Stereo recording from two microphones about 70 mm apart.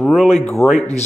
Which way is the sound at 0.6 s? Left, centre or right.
Left.